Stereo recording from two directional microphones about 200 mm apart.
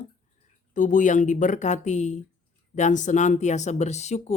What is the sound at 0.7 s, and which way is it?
Speech, 40° left (ahead or behind).